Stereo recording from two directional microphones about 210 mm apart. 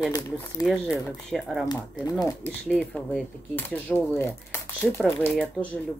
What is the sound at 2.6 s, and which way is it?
Speech, centre (ahead or behind).